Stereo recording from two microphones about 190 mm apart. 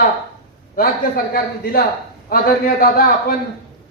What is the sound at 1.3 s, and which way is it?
A man's voice, 50° left (ahead or behind).